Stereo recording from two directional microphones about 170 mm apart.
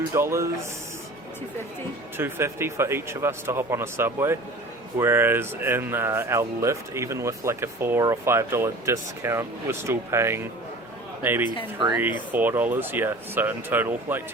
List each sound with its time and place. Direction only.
0.1 s speech: 15° right (ahead or behind)
2.1 s speech: 15° right (ahead or behind)